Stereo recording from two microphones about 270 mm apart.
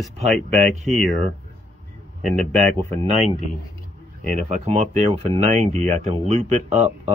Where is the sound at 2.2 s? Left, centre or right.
Centre.